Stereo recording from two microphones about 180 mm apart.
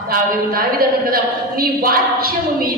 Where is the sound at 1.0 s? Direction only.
55° right (ahead or behind).